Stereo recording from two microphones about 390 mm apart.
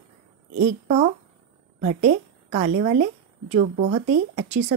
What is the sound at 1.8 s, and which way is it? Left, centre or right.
A woman's voice, centre.